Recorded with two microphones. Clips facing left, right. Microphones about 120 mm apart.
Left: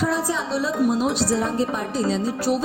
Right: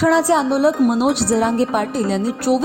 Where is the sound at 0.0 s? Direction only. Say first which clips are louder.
Right 9 dB; 85° right.